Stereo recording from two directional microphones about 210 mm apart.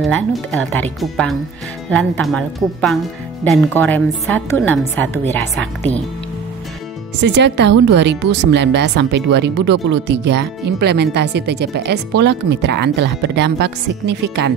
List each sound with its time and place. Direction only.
0.0 s a woman's voice: centre (ahead or behind)
7.2 s speech: 55° right (ahead or behind)